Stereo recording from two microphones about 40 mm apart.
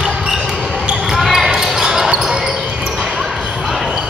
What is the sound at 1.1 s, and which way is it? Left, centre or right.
Basketball bounce, centre.